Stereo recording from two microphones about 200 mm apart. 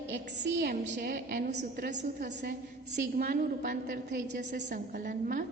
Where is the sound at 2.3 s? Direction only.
60° right (ahead or behind).